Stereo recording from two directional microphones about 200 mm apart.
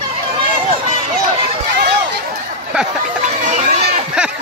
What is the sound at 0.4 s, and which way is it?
Run, 30° right (ahead or behind).